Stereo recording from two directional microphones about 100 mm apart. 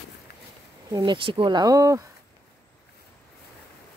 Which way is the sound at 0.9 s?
50° right (ahead or behind).